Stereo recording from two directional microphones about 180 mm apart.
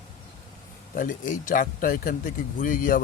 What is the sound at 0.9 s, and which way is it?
Speech, 45° left (ahead or behind).